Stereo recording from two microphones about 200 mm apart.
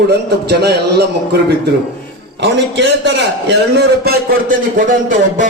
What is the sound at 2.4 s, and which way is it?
A man's voice, 60° right (ahead or behind).